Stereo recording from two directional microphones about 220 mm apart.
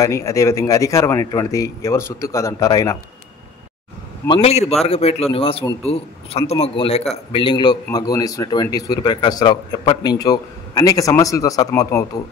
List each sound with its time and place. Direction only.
0.0 s a man's voice: 15° left (ahead or behind)
4.3 s a man's voice: 25° left (ahead or behind)